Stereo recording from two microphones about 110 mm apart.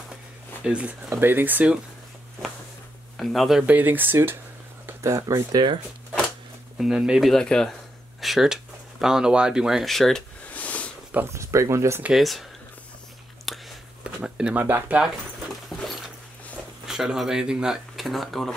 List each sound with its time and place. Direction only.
0.7 s speech: 10° right (ahead or behind)
3.2 s speech: centre (ahead or behind)
3.6 s speech: 15° right (ahead or behind); by 5.8 s 40° right (ahead or behind)
6.8 s speech: 5° right (ahead or behind)
10.5 s a sound: 15° left (ahead or behind)
11.2 s speech: 25° right (ahead or behind)
12.0 s speech: centre (ahead or behind)
13.5 s a sound: centre (ahead or behind)
14.0 s speech: 10° right (ahead or behind)
16.8 s speech: 5° right (ahead or behind)